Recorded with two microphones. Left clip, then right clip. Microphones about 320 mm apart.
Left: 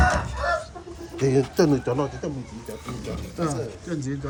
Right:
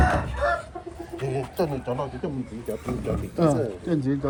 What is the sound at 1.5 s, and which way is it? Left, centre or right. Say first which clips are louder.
Speech: left 5 dB; left.